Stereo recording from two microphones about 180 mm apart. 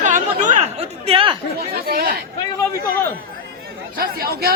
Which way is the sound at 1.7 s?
55° right (ahead or behind).